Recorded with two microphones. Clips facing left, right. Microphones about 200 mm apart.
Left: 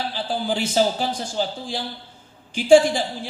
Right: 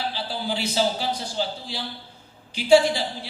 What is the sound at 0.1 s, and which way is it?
A man's voice, 50° left (ahead or behind).